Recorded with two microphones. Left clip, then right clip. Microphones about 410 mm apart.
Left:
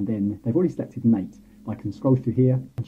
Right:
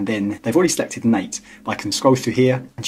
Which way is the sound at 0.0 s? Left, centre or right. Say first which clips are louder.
Right 6 dB; centre.